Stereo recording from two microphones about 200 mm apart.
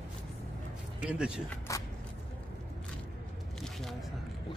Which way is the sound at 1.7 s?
15° left (ahead or behind).